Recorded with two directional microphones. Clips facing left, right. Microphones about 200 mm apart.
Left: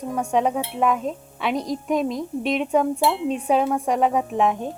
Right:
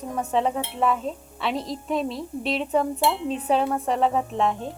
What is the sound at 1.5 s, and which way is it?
Speech, 25° right (ahead or behind).